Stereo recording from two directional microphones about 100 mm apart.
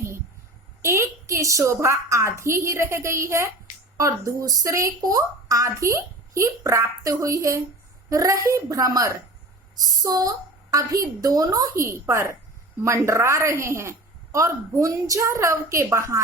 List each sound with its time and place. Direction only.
0.8 s a woman's voice: 30° right (ahead or behind)